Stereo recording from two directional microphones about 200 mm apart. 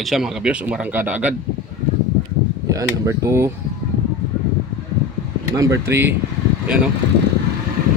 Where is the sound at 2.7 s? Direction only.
15° right (ahead or behind).